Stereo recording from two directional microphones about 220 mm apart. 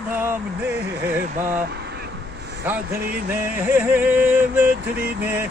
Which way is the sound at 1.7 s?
50° right (ahead or behind).